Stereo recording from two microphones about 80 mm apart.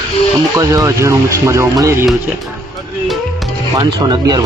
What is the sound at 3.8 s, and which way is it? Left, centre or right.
Speech, right.